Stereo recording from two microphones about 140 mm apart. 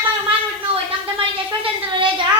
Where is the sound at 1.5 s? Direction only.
35° right (ahead or behind).